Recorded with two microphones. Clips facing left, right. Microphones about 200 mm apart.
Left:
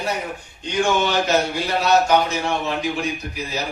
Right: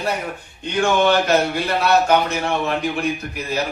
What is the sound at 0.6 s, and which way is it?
A man's voice, 55° right (ahead or behind).